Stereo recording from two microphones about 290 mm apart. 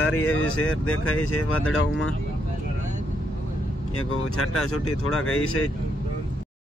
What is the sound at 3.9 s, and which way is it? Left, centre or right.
Speech, left.